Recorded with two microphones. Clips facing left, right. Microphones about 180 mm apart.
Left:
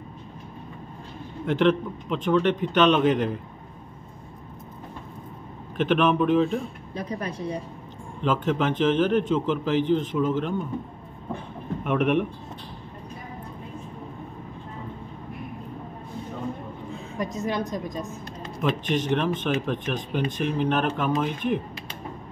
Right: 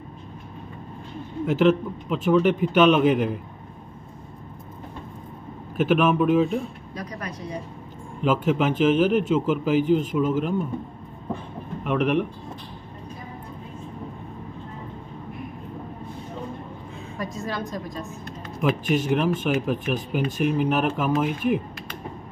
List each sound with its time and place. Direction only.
1.4 s speech: 5° right (ahead or behind)
5.8 s speech: 5° right (ahead or behind)
7.0 s a woman's voice: 30° left (ahead or behind)
8.2 s speech: 10° right (ahead or behind)
11.8 s a man's voice: centre (ahead or behind)
17.2 s a woman's voice: 20° left (ahead or behind)
18.6 s speech: 10° right (ahead or behind)